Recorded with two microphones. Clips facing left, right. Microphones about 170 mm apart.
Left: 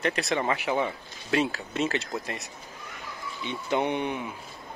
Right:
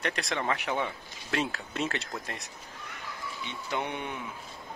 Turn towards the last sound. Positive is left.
turn(degrees=20)  # may be behind; listen again after turning